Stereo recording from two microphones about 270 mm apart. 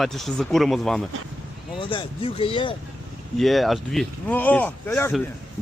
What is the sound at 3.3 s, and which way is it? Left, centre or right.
A man's voice, centre.